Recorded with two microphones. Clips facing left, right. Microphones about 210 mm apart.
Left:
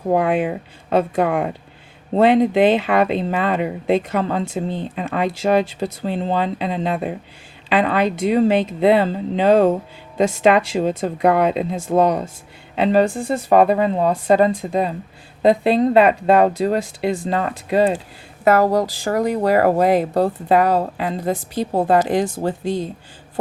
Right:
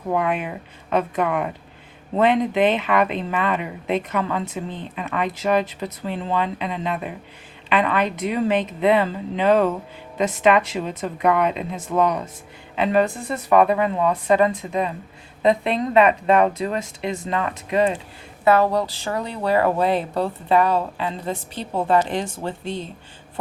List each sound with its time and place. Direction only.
0.1 s speech: 35° left (ahead or behind)